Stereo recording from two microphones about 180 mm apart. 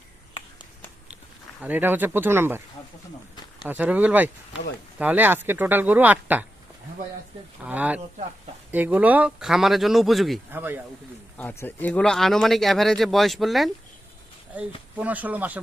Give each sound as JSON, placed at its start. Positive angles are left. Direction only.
{"t": 0.3, "sound": "a sound", "side_deg": 25}
{"t": 1.6, "sound": "speech", "side_deg": -10}
{"t": 3.6, "sound": "speech", "side_deg": -10}
{"t": 7.6, "sound": "speech", "side_deg": -10}
{"t": 10.5, "sound": "speech", "side_deg": -10}
{"t": 11.3, "sound": "speech", "side_deg": 10}
{"t": 14.9, "sound": "speech", "side_deg": -10}